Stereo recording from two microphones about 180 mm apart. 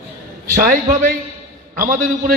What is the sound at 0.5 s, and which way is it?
A man's voice, 50° right (ahead or behind).